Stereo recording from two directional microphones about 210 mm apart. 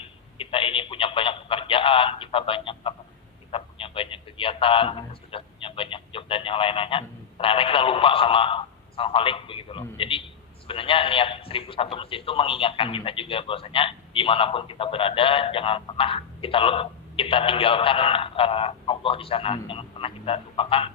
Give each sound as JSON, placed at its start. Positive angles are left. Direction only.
{"t": 0.3, "sound": "telephone", "side_deg": 25}
{"t": 3.5, "sound": "a man's voice", "side_deg": 25}